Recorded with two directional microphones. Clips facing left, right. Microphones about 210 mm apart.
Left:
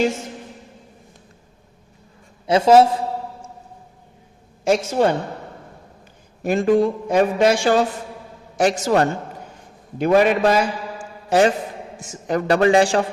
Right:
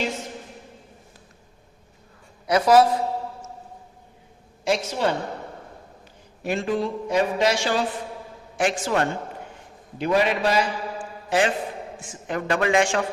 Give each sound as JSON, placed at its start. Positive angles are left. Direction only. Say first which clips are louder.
{"t": 2.5, "sound": "a man's voice", "louder": "left 4 dB", "side_deg": 25}
{"t": 4.6, "sound": "a man's voice", "louder": "left 6 dB", "side_deg": 45}
{"t": 6.4, "sound": "a man's voice", "louder": "left 8 dB", "side_deg": 45}
{"t": 8.5, "sound": "a man's voice", "louder": "left 5 dB", "side_deg": 40}